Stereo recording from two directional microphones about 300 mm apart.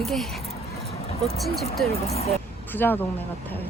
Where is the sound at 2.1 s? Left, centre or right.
Left.